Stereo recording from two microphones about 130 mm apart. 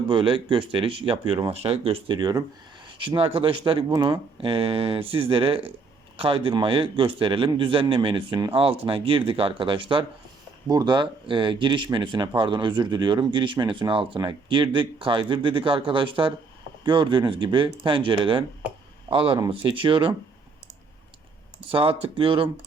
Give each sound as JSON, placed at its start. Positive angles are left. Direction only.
{"t": 0.1, "sound": "a man's voice", "side_deg": -40}
{"t": 2.1, "sound": "a man's voice", "side_deg": -30}
{"t": 21.7, "sound": "a man's voice", "side_deg": -45}